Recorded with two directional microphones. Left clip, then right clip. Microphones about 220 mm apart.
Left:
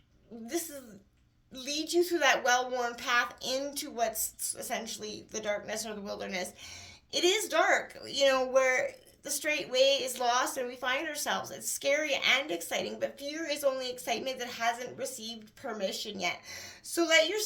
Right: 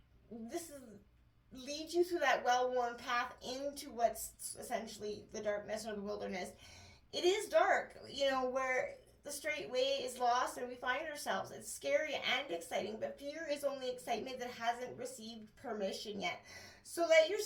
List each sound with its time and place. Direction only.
1.6 s a woman's voice: 45° left (ahead or behind)